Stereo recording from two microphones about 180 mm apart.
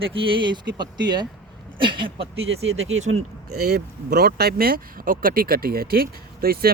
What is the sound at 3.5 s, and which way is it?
Speech, 60° right (ahead or behind).